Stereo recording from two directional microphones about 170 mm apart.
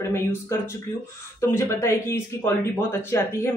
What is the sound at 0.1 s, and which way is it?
Speech, 15° left (ahead or behind).